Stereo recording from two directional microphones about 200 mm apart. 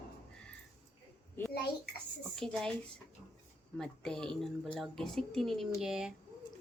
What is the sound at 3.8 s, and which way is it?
A woman's voice, 5° left (ahead or behind).